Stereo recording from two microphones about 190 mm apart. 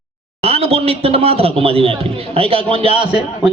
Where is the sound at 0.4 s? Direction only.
30° right (ahead or behind).